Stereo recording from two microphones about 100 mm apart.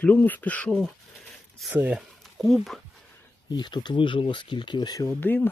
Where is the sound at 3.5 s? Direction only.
45° left (ahead or behind).